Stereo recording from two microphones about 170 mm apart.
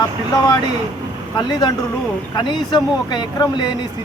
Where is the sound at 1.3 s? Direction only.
25° left (ahead or behind).